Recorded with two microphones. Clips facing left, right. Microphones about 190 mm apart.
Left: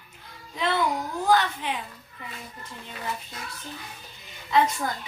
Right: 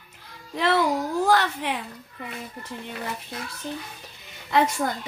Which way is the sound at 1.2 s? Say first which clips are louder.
Left 2 dB; 60° right (ahead or behind).